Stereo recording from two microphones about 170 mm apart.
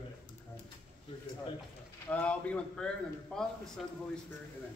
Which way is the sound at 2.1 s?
10° left (ahead or behind).